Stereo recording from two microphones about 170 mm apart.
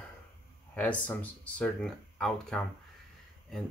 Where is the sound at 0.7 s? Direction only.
10° left (ahead or behind).